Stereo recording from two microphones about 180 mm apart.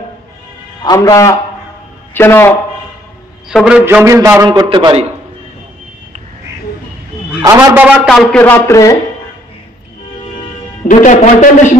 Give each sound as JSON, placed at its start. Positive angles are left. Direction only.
{"t": 0.8, "sound": "a man's voice", "side_deg": 20}
{"t": 3.4, "sound": "a man's voice", "side_deg": -5}
{"t": 7.4, "sound": "a man's voice", "side_deg": -20}
{"t": 7.8, "sound": "a man's voice", "side_deg": -5}
{"t": 10.9, "sound": "a man's voice", "side_deg": 45}